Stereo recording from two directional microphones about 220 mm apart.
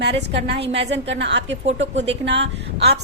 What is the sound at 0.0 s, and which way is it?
A woman's voice, 50° right (ahead or behind).